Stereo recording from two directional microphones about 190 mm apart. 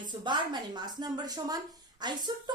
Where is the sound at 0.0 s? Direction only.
25° right (ahead or behind).